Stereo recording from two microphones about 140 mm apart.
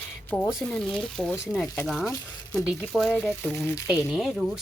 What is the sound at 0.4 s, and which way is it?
Speech, 5° left (ahead or behind).